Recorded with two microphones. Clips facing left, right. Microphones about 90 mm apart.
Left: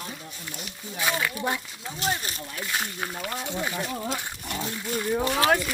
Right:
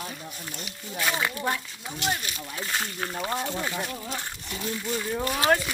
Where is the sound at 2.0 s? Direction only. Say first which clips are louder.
Left 1 dB; 40° left (ahead or behind).